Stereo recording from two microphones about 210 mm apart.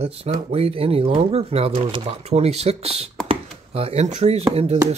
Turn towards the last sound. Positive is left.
turn(degrees=-30)  # may be behind; listen again after turning